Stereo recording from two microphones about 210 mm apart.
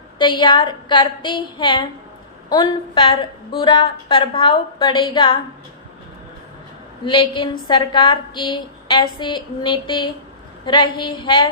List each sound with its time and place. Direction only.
0.2 s a woman's voice: 20° left (ahead or behind)
7.0 s a woman's voice: 20° left (ahead or behind)